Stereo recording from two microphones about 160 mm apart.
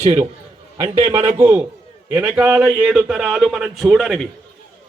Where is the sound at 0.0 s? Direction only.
45° right (ahead or behind).